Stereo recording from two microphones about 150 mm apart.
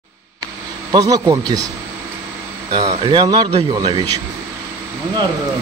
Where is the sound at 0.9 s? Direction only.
25° right (ahead or behind).